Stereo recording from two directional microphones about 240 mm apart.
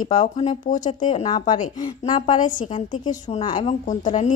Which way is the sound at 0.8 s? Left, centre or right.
Centre.